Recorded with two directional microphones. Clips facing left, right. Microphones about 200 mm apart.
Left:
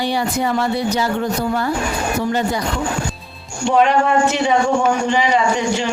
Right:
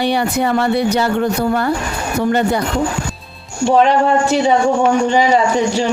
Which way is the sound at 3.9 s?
35° right (ahead or behind).